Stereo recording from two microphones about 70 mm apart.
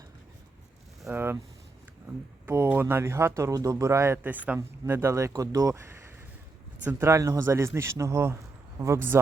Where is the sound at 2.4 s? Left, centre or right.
Right.